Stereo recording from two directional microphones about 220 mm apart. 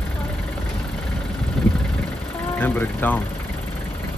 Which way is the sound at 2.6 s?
10° left (ahead or behind).